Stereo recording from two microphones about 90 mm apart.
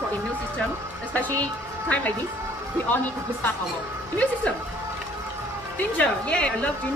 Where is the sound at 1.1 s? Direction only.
15° left (ahead or behind).